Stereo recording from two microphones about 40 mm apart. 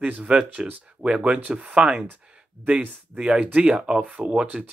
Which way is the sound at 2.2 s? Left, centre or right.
Right.